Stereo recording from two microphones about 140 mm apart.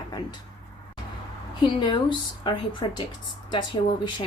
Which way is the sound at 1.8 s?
35° left (ahead or behind).